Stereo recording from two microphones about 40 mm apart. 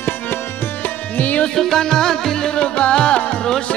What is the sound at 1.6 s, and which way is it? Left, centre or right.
Music, centre.